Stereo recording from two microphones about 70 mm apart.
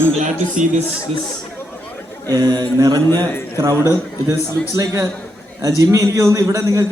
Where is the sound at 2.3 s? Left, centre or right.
Right.